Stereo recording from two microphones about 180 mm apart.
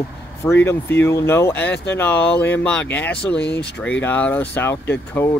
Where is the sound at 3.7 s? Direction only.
5° left (ahead or behind).